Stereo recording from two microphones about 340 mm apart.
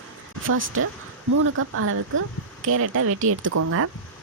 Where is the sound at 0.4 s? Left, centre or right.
Right.